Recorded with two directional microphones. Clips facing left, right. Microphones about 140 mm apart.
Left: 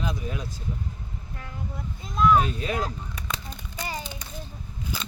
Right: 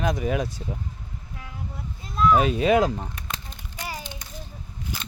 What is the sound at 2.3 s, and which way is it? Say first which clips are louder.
Speech: right 6 dB; 90° right.